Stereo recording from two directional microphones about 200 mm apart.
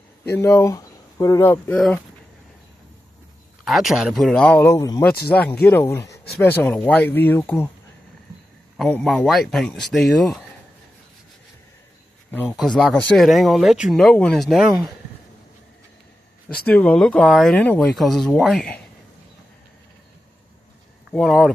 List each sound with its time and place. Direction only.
0.3 s speech: 15° left (ahead or behind)
3.6 s speech: centre (ahead or behind)
6.0 s a sound: 60° left (ahead or behind)
6.4 s speech: 10° left (ahead or behind)
8.7 s speech: centre (ahead or behind)
12.3 s speech: 10° left (ahead or behind)
16.6 s speech: 5° left (ahead or behind)
21.1 s speech: centre (ahead or behind)